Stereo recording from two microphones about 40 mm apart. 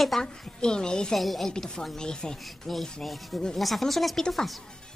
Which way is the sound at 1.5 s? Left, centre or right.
Centre.